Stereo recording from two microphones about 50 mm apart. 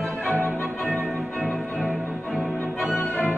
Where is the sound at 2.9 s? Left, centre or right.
Left.